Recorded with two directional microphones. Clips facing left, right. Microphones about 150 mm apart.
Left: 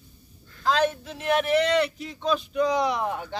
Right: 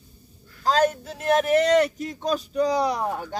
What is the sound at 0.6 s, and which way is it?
Speech, 40° right (ahead or behind).